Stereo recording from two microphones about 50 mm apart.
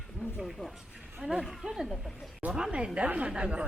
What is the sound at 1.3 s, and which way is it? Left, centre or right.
Speech, centre.